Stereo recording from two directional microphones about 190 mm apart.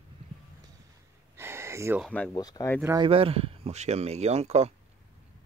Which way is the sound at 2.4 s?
20° left (ahead or behind).